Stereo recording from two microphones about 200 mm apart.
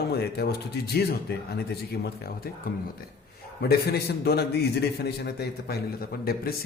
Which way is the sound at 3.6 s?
50° left (ahead or behind).